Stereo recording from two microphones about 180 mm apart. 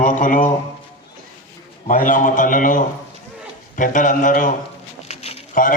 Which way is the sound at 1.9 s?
50° left (ahead or behind).